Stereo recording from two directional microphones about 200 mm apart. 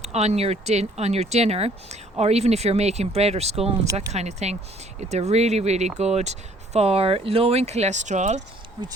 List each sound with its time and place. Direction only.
0.0 s speech: 35° right (ahead or behind)